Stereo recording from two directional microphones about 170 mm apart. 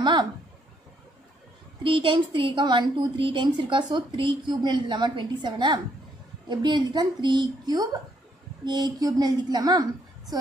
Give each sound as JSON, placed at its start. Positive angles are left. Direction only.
{"t": 0.0, "sound": "speech", "side_deg": -25}
{"t": 1.8, "sound": "a woman's voice", "side_deg": -30}